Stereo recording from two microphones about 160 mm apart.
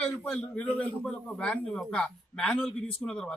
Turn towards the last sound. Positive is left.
turn(degrees=5)  # may be behind; listen again after turning